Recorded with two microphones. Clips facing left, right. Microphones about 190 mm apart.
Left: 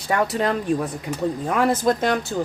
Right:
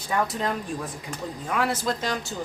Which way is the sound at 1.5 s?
50° left (ahead or behind).